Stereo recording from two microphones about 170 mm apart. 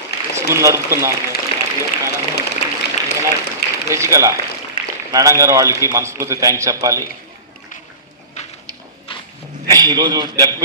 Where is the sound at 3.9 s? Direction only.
15° right (ahead or behind).